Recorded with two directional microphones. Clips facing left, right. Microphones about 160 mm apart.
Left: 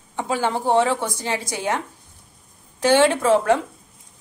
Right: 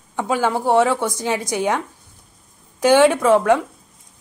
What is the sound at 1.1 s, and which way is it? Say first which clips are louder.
A woman's voice: right 4 dB; 15° right (ahead or behind).